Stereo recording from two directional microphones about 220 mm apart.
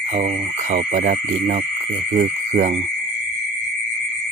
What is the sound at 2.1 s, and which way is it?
Speech, 30° right (ahead or behind).